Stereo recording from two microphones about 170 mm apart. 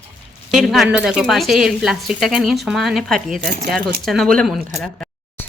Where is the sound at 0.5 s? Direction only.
Centre (ahead or behind).